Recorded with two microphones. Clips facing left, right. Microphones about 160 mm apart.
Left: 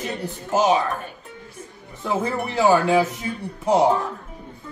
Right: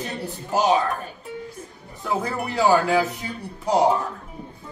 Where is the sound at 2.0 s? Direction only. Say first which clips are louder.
Left 2 dB; 20° left (ahead or behind).